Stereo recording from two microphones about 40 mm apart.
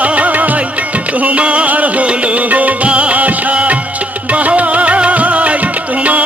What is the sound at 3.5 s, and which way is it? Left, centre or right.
Music, right.